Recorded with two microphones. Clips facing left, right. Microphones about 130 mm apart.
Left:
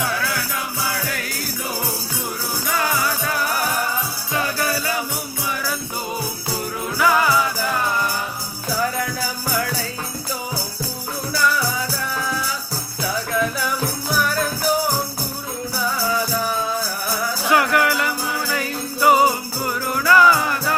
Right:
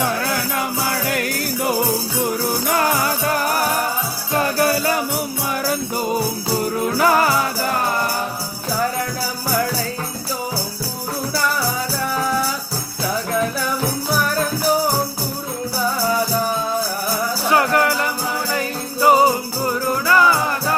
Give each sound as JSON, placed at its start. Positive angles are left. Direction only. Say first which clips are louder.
{"t": 0.0, "sound": "music", "louder": "right 3 dB", "side_deg": -45}
{"t": 2.6, "sound": "music", "louder": "right 2 dB", "side_deg": -45}
{"t": 6.9, "sound": "music", "louder": "right 1 dB", "side_deg": -40}
{"t": 17.5, "sound": "music", "louder": "right 1 dB", "side_deg": -35}
{"t": 18.5, "sound": "jingle bell", "louder": "right 2 dB", "side_deg": -30}
{"t": 20.1, "sound": "music", "louder": "left 2 dB", "side_deg": -30}